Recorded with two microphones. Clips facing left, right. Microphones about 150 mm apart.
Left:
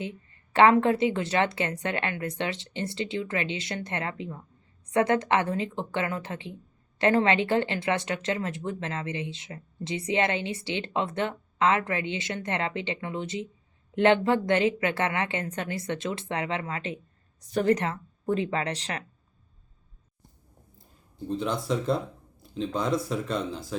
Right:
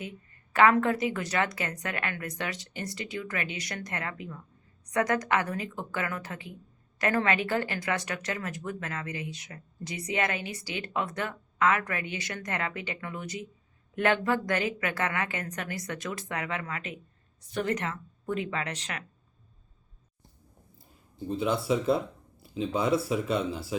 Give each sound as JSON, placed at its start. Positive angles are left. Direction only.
{"t": 0.0, "sound": "speech", "side_deg": 25}
{"t": 21.2, "sound": "speech", "side_deg": -5}